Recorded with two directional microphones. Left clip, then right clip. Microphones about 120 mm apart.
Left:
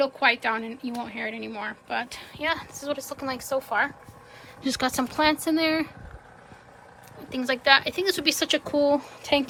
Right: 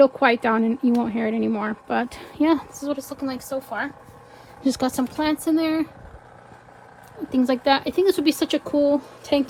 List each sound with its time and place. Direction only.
0.0 s speech: 80° right
2.9 s a woman's voice: 40° right (ahead or behind); by 3.9 s 20° right (ahead or behind)
4.6 s speech: 55° right (ahead or behind)
4.9 s a woman's voice: 15° right (ahead or behind)
7.3 s speech: 45° right (ahead or behind); by 9.5 s 30° right (ahead or behind)